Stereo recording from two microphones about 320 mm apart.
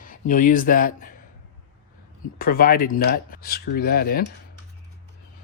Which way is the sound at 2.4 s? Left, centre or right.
Left.